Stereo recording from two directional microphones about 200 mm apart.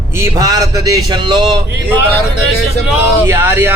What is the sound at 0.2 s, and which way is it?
A man's voice, 15° right (ahead or behind).